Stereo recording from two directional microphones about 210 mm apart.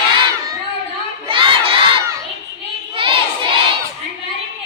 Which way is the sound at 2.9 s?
25° right (ahead or behind).